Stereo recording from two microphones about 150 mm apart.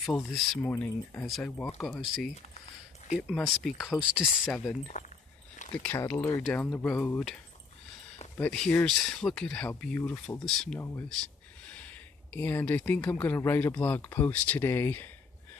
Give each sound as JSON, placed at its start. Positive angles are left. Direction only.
{"t": 0.0, "sound": "speech", "side_deg": 0}
{"t": 0.6, "sound": "speech", "side_deg": 15}
{"t": 4.5, "sound": "speech", "side_deg": 5}
{"t": 5.0, "sound": "speech", "side_deg": 50}
{"t": 5.6, "sound": "a sound", "side_deg": 55}
{"t": 5.9, "sound": "speech", "side_deg": 15}
{"t": 8.4, "sound": "speech", "side_deg": 10}
{"t": 10.8, "sound": "speech", "side_deg": 15}